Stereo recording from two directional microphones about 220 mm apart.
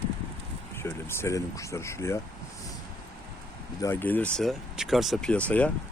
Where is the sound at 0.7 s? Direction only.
10° left (ahead or behind).